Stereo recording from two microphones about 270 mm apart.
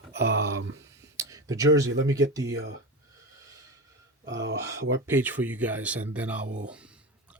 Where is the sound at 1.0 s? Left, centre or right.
Centre.